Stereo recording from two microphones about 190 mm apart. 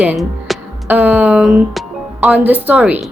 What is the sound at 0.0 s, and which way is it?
A woman's voice, 5° right (ahead or behind).